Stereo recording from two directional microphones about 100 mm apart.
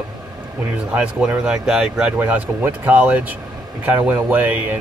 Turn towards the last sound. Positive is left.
turn(degrees=-15)  # may be behind; listen again after turning